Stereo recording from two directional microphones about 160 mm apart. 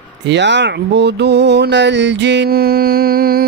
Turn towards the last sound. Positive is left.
turn(degrees=-70)  # may be behind; listen again after turning